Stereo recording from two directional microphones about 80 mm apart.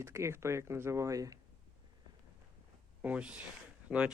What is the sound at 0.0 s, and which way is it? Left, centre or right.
Speech, right.